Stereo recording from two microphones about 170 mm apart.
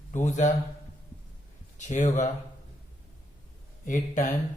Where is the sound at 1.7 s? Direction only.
45° left (ahead or behind).